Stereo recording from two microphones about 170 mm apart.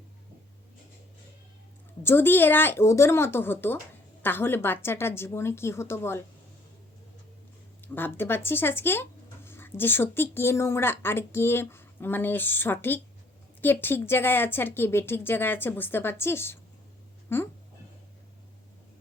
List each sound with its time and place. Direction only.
2.0 s speech: 15° left (ahead or behind)
7.9 s speech: 10° left (ahead or behind)